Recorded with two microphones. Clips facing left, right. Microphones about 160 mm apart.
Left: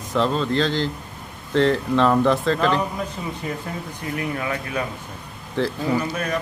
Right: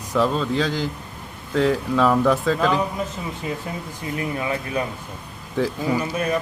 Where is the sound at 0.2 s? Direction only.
5° right (ahead or behind).